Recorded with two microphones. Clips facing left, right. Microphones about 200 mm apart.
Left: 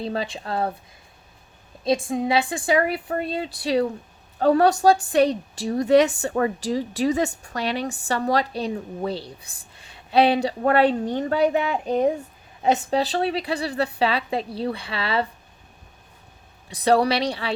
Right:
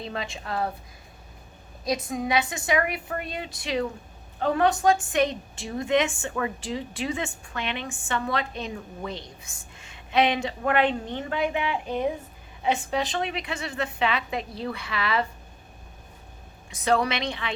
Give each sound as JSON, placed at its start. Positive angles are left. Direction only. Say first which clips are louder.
{"t": 0.0, "sound": "a woman's voice", "louder": "left 6 dB", "side_deg": 30}
{"t": 1.8, "sound": "a woman's voice", "louder": "left 5 dB", "side_deg": 25}
{"t": 16.6, "sound": "a woman's voice", "louder": "left 5 dB", "side_deg": 35}